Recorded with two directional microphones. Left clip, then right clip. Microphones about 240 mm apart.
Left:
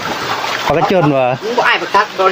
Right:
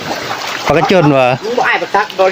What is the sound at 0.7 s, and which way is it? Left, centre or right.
Speech, centre.